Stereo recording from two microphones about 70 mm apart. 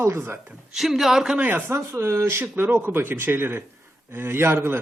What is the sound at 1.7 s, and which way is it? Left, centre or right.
Speech, right.